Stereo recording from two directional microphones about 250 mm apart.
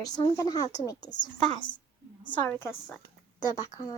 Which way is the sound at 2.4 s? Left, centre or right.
Centre.